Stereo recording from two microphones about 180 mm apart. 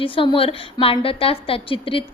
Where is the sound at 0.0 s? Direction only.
30° left (ahead or behind).